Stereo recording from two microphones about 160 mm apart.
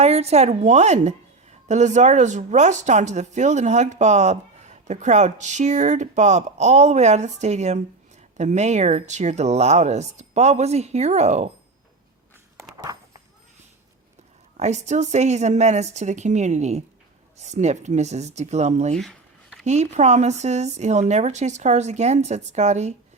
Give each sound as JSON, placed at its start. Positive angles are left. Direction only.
{"t": 0.0, "sound": "speech", "side_deg": -40}
{"t": 12.9, "sound": "speech", "side_deg": -20}
{"t": 14.6, "sound": "speech", "side_deg": -45}
{"t": 18.9, "sound": "a sound", "side_deg": 0}
{"t": 19.6, "sound": "speech", "side_deg": -45}